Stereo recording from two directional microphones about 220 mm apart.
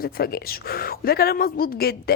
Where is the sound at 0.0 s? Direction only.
45° left (ahead or behind).